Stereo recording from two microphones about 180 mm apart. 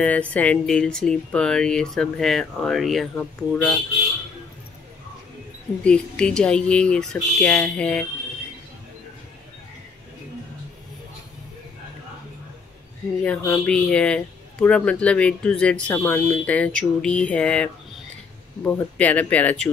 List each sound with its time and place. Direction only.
0.0 s speech: 5° left (ahead or behind)
5.9 s speech: 5° left (ahead or behind)
13.2 s speech: 5° left (ahead or behind)